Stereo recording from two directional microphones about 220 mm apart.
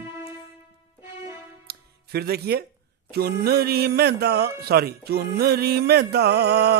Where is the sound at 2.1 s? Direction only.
45° right (ahead or behind).